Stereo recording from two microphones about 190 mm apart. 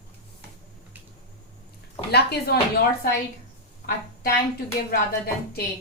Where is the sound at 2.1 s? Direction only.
60° left (ahead or behind).